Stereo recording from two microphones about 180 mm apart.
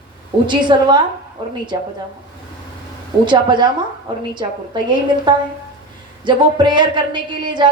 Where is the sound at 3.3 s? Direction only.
25° right (ahead or behind).